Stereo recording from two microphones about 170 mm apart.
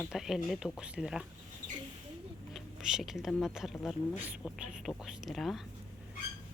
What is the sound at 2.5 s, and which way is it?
Speech, centre (ahead or behind).